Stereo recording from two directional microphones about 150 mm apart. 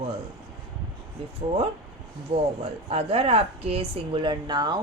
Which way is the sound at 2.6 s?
40° right (ahead or behind).